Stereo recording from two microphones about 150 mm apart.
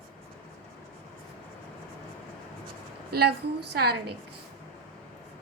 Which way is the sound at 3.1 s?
90° right.